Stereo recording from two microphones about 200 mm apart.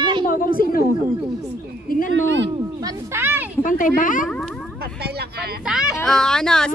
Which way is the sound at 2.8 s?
10° right (ahead or behind).